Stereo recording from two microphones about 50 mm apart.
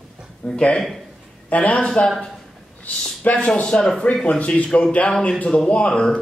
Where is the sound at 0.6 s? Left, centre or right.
Left.